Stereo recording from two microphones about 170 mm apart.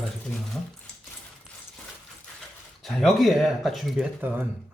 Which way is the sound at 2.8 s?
Centre (ahead or behind).